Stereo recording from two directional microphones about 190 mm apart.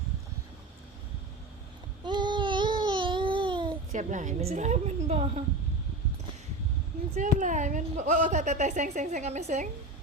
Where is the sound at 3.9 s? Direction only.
40° right (ahead or behind).